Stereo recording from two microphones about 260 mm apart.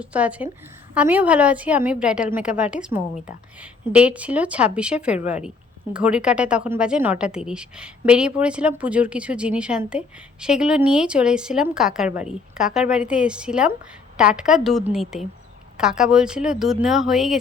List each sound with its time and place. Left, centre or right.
0.0 s a woman's voice: centre